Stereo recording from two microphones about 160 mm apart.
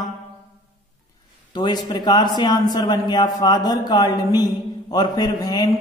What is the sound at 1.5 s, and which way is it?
Speech, 30° left (ahead or behind).